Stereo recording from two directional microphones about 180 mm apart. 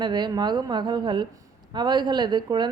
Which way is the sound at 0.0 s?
25° right (ahead or behind).